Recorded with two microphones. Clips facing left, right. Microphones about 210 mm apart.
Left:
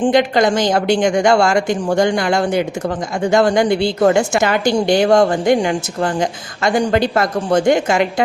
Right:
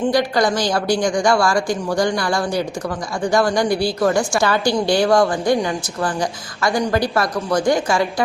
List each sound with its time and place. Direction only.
0.0 s a woman's voice: 20° left (ahead or behind)